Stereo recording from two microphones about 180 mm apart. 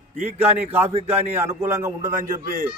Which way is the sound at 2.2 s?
45° right (ahead or behind).